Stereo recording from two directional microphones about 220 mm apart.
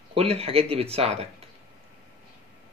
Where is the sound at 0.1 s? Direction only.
25° right (ahead or behind).